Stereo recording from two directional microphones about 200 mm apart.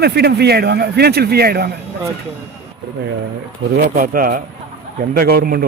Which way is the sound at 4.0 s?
45° right (ahead or behind).